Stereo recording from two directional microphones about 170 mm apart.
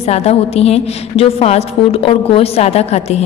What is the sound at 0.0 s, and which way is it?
A woman's voice, 35° left (ahead or behind).